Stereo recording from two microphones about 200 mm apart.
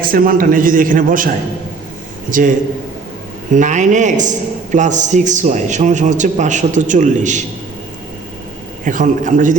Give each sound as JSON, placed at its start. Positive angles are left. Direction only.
{"t": 0.1, "sound": "a man's voice", "side_deg": -45}
{"t": 3.5, "sound": "a man's voice", "side_deg": -40}
{"t": 8.8, "sound": "a man's voice", "side_deg": -40}